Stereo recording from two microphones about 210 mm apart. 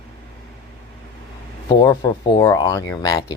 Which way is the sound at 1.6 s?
20° left (ahead or behind).